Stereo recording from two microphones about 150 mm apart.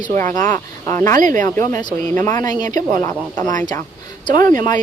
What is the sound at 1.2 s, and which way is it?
Speech, 60° right (ahead or behind).